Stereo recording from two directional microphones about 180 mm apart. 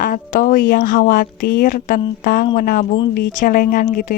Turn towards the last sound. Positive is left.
turn(degrees=50)  # may be behind; listen again after turning